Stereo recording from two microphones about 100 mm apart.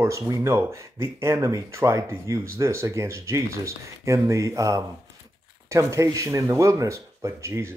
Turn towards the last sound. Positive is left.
turn(degrees=-25)  # may be behind; listen again after turning